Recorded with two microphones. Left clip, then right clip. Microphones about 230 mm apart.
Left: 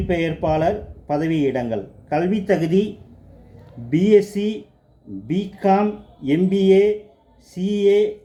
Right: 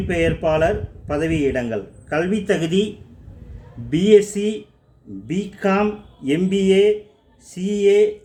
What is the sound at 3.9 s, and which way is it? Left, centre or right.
Speech, centre.